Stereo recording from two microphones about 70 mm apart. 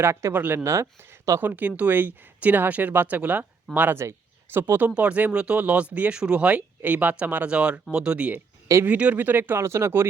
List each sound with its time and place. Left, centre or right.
0.0 s speech: right
0.3 s speech: right
0.6 s speech: right
1.4 s speech: right
4.0 s speech: right
4.5 s speech: right
4.9 s speech: centre; by 10.1 s right